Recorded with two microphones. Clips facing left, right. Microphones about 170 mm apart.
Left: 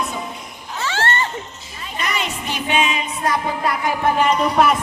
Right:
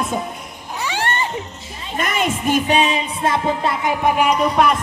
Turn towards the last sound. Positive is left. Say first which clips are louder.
# even
turn(degrees=0)  # may be behind; listen again after turning